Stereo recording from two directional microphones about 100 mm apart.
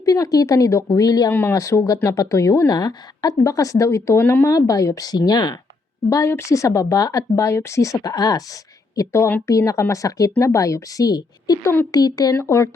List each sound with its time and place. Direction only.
0.0 s speech: 35° left (ahead or behind)
1.3 s speech: 20° left (ahead or behind)
1.5 s speech: 35° left (ahead or behind)
6.1 s speech: 30° left (ahead or behind)
9.0 s speech: 25° left (ahead or behind)